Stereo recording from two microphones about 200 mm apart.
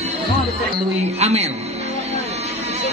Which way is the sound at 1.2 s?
30° right (ahead or behind).